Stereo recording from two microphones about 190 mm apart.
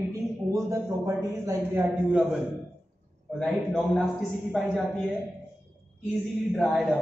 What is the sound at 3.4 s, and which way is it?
Speech, 5° left (ahead or behind).